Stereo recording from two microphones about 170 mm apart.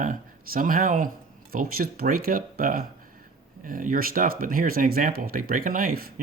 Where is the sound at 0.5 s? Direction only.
55° right (ahead or behind).